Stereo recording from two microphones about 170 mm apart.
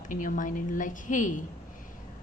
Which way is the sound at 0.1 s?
50° left (ahead or behind).